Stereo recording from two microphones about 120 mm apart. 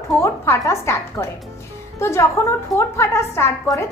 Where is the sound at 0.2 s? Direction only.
25° left (ahead or behind).